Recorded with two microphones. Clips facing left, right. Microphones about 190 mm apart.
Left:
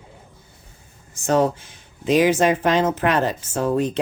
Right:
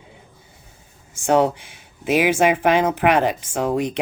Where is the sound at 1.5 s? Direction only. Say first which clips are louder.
Right 1 dB; 10° right (ahead or behind).